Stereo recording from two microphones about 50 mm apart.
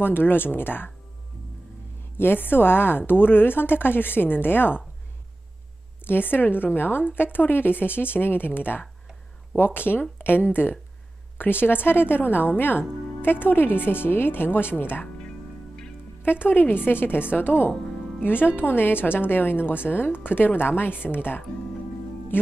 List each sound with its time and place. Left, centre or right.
0.0 s a woman's voice: left
2.1 s a woman's voice: left
6.0 s a woman's voice: left
16.2 s a woman's voice: left
17.7 s music: centre
18.2 s a woman's voice: left
22.3 s music: left